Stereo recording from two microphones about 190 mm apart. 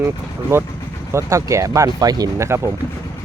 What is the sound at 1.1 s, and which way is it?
Speech, 15° right (ahead or behind).